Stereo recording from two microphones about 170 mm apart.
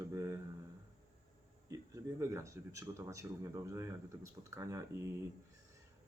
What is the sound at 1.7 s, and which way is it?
Speech, 20° right (ahead or behind).